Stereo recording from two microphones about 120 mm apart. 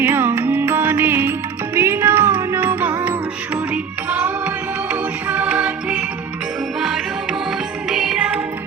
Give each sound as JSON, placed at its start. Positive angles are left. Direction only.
{"t": 0.0, "sound": "music", "side_deg": -15}